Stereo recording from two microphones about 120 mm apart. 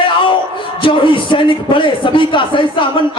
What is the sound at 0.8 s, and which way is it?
A man's voice, 45° left (ahead or behind).